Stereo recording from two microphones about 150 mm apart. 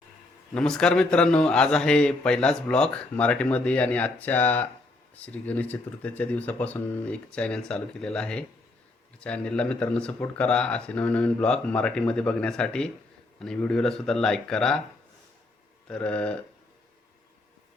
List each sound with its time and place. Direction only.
0.5 s a man's voice: 5° left (ahead or behind)
15.9 s speech: 10° left (ahead or behind)